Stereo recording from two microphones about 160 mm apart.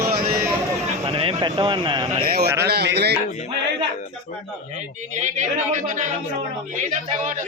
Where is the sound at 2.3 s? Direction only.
90° right.